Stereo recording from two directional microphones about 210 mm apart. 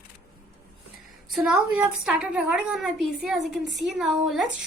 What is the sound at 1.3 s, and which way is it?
A woman's voice, 5° right (ahead or behind).